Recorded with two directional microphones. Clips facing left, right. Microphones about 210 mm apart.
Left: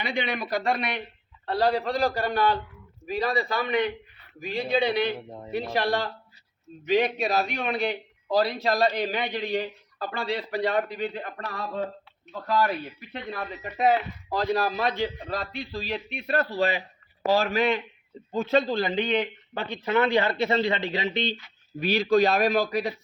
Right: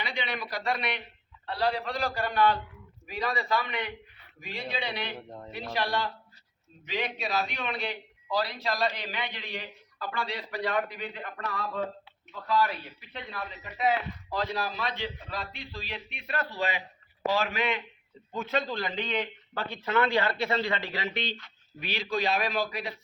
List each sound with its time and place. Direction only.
0.0 s a man's voice: 50° left (ahead or behind); by 21.3 s 20° left (ahead or behind)
21.8 s a man's voice: 40° left (ahead or behind)